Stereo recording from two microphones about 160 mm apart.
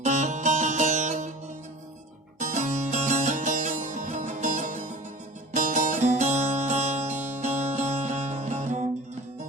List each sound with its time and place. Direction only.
0.0 s music: 50° right (ahead or behind)
2.4 s music: 50° right (ahead or behind)